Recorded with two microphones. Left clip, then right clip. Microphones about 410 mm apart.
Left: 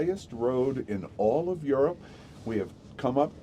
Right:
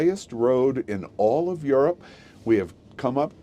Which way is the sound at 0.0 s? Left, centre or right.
Right.